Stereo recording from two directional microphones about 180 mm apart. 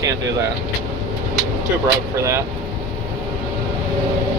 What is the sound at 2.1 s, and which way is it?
Speech, 15° right (ahead or behind).